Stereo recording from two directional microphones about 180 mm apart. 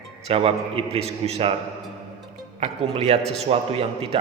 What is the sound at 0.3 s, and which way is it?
A man's voice, 30° right (ahead or behind).